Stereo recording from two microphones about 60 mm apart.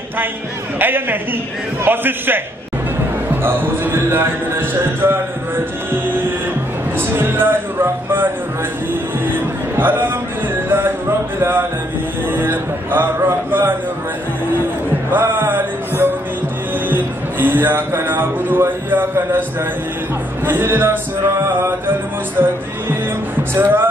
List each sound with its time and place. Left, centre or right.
0.7 s speech: right
7.0 s music: right
9.3 s music: right
11.3 s a man's voice: right
15.0 s music: right
16.9 s speech: right
20.4 s speech: right